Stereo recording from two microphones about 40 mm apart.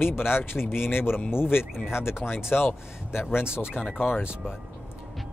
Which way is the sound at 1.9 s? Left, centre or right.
Left.